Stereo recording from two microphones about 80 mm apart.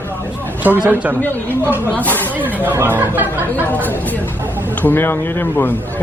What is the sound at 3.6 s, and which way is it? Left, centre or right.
A man's voice, left.